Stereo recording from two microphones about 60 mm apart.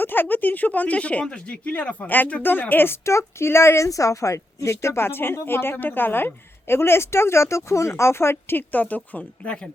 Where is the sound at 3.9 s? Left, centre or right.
Left.